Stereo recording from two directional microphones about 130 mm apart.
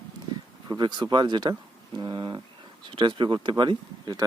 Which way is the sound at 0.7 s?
35° right (ahead or behind).